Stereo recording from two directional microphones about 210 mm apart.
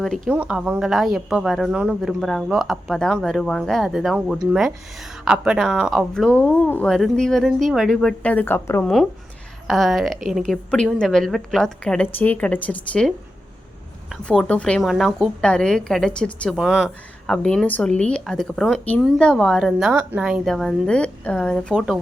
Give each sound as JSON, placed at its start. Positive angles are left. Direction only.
{"t": 0.0, "sound": "a woman's voice", "side_deg": 0}
{"t": 9.6, "sound": "a woman's voice", "side_deg": 0}